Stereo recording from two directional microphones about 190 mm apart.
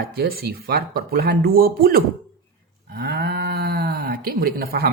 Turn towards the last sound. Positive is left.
turn(degrees=-55)  # may be behind; listen again after turning